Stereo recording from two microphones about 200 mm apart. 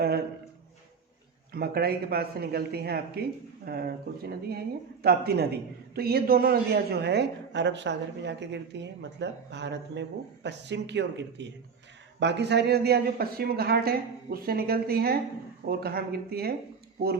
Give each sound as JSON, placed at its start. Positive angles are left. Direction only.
{"t": 1.5, "sound": "a man's voice", "side_deg": -50}